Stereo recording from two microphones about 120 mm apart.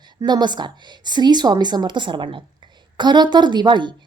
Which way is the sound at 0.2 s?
35° right (ahead or behind).